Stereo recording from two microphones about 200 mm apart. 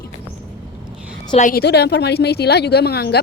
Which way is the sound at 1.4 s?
40° left (ahead or behind).